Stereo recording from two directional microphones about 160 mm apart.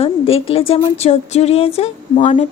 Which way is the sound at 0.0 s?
35° left (ahead or behind).